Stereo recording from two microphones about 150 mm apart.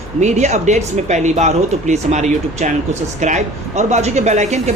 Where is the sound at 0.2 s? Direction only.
50° right (ahead or behind).